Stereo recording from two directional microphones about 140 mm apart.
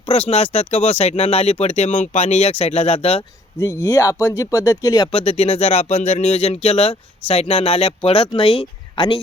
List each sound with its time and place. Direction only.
0.0 s speech: 45° left (ahead or behind)
3.6 s speech: 20° left (ahead or behind)
5.1 s speech: 45° left (ahead or behind)